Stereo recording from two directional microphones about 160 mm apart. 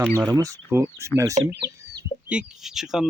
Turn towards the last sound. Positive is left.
turn(degrees=0)  # may be behind; listen again after turning